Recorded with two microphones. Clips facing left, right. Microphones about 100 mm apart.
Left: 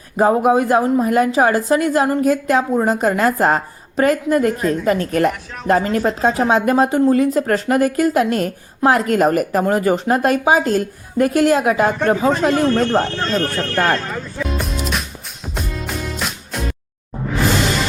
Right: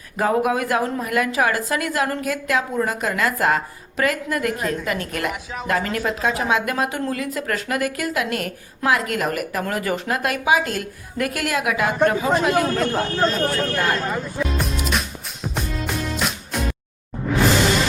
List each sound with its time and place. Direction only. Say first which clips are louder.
0.2 s a woman's voice: left 6 dB; 30° left (ahead or behind)
13.1 s speech: even; 15° right (ahead or behind)
13.7 s speech: left 9 dB; 45° left (ahead or behind)
14.0 s speech: right 1 dB; 15° right (ahead or behind)
14.6 s music: left 1 dB; centre (ahead or behind)